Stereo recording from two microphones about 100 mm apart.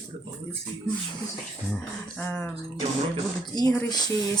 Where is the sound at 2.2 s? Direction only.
15° left (ahead or behind).